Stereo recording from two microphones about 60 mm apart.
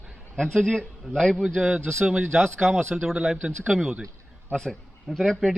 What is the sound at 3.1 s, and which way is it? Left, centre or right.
A man's voice, centre.